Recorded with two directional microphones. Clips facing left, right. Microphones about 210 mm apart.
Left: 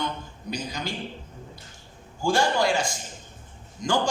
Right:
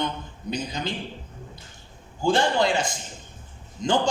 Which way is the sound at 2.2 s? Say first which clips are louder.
Right 1 dB; 20° right (ahead or behind).